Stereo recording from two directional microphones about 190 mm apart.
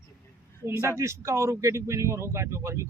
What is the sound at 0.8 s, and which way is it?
Speech, 15° right (ahead or behind).